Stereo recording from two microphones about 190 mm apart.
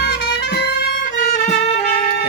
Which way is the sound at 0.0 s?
60° left (ahead or behind).